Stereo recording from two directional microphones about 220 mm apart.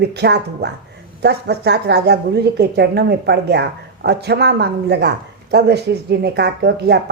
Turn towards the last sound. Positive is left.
turn(degrees=-50)  # may be behind; listen again after turning